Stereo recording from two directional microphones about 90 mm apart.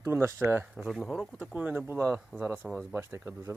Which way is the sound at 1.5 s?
20° right (ahead or behind).